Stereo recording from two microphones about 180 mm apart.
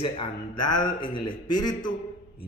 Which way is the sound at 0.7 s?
25° left (ahead or behind).